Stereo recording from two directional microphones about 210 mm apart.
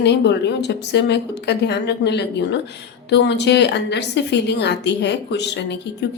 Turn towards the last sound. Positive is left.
turn(degrees=55)  # may be behind; listen again after turning